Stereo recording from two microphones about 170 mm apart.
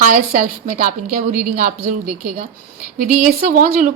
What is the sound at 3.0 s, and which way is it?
Speech, 60° right (ahead or behind).